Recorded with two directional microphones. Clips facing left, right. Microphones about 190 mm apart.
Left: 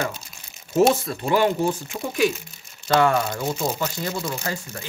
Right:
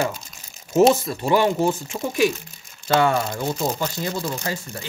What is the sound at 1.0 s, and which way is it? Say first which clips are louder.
Speech: right 1 dB; 25° right (ahead or behind).